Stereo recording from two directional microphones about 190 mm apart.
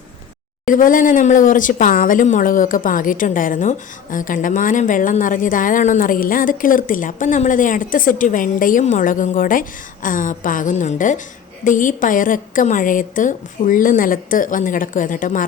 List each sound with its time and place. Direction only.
0.6 s speech: 45° left (ahead or behind)